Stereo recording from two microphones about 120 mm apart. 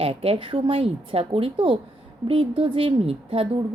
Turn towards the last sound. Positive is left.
turn(degrees=-55)  # may be behind; listen again after turning